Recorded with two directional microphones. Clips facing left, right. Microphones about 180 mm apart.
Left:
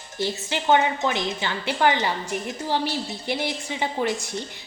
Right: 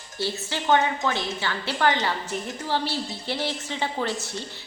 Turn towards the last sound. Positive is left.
turn(degrees=15)  # may be behind; listen again after turning